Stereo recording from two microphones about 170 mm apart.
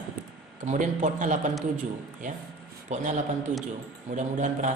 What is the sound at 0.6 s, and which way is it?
Speech, 45° right (ahead or behind).